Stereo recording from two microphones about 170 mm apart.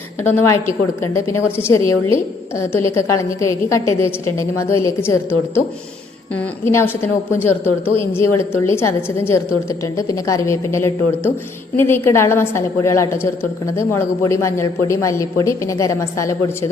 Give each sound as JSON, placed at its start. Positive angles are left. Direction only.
{"t": 0.2, "sound": "a woman's voice", "side_deg": 15}